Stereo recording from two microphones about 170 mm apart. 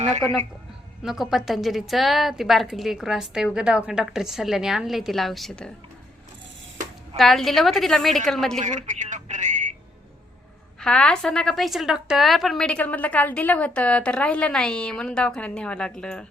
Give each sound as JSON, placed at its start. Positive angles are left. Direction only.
{"t": 1.0, "sound": "a woman's voice", "side_deg": 0}
{"t": 7.2, "sound": "a woman's voice", "side_deg": 0}
{"t": 8.6, "sound": "speech", "side_deg": -45}
{"t": 10.8, "sound": "a woman's voice", "side_deg": 5}